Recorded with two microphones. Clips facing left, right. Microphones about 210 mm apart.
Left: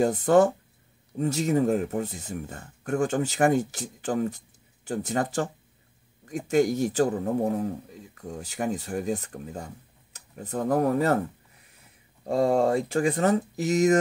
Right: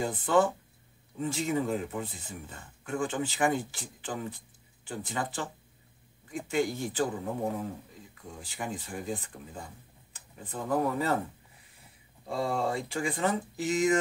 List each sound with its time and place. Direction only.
0.0 s speech: 40° left (ahead or behind)
12.3 s speech: 45° left (ahead or behind)